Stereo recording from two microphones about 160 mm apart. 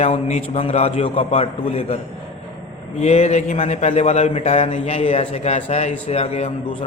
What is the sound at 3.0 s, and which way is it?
A man's voice, 40° left (ahead or behind).